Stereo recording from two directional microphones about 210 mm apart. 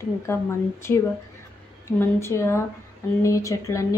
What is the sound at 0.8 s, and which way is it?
Speech, 10° left (ahead or behind).